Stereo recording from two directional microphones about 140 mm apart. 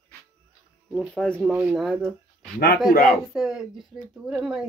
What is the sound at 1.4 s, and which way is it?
Speech, 5° right (ahead or behind).